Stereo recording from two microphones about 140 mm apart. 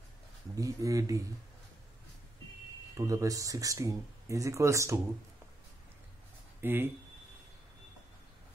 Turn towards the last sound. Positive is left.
turn(degrees=-15)  # may be behind; listen again after turning